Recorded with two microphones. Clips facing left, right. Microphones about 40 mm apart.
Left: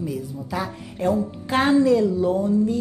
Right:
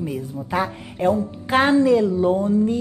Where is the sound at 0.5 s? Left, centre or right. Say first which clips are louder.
Right 5 dB; right.